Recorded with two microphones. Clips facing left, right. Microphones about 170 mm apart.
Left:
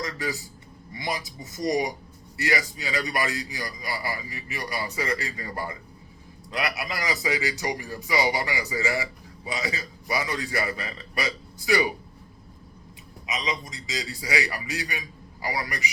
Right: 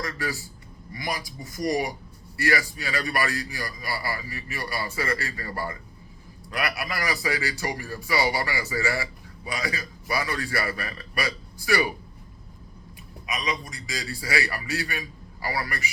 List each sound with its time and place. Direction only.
0.0 s a man's voice: 20° left (ahead or behind)
13.2 s a man's voice: 20° left (ahead or behind)